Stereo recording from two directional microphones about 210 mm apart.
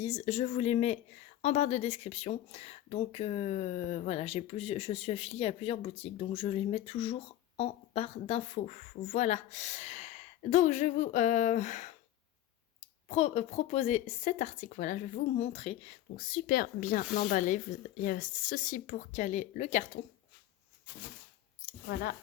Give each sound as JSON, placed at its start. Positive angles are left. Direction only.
{"t": 0.0, "sound": "speech", "side_deg": 30}
{"t": 16.3, "sound": "speech", "side_deg": 45}
{"t": 21.7, "sound": "speech", "side_deg": 50}